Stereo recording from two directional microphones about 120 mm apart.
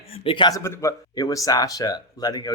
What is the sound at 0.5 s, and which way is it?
Speech, 25° left (ahead or behind).